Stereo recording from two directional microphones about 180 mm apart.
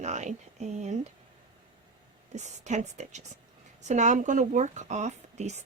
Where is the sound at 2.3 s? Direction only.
40° right (ahead or behind).